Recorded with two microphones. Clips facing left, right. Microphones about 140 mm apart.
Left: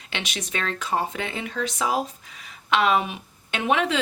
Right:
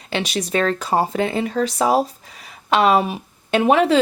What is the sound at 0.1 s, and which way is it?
A woman's voice, 35° right (ahead or behind).